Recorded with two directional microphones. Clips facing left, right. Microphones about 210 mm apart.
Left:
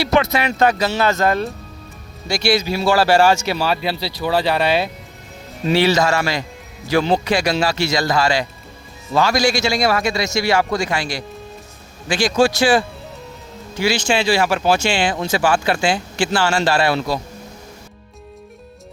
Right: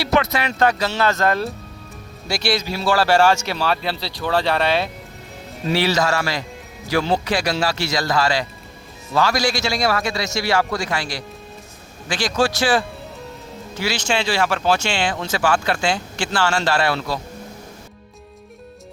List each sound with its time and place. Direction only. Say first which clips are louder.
0.0 s a man's voice: left 2 dB; 20° left (ahead or behind)
0.6 s speech: left 1 dB; 10° left (ahead or behind)
2.6 s speech: left 3 dB; 15° left (ahead or behind)
5.7 s a man's voice: left 3 dB; 25° left (ahead or behind)